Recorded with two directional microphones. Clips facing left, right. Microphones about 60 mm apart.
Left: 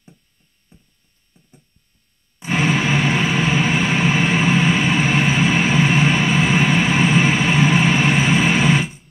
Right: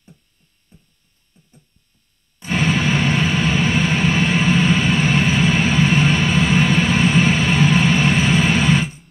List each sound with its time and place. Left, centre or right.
0.7 s hum: centre
2.3 s vehicle: centre